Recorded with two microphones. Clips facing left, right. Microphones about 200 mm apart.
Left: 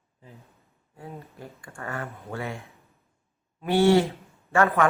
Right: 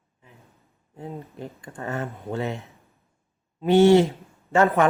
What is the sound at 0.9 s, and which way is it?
A man's voice, 25° right (ahead or behind).